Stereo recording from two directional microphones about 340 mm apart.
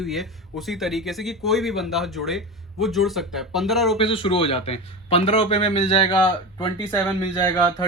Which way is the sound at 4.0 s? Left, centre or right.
Centre.